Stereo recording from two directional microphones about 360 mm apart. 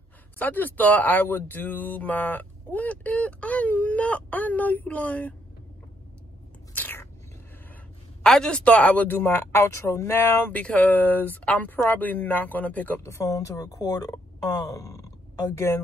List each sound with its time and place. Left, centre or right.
0.4 s speech: centre
6.7 s biting: centre
8.2 s speech: centre
14.6 s a sound: centre